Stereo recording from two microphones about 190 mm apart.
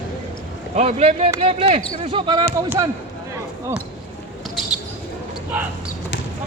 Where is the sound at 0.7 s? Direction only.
35° right (ahead or behind).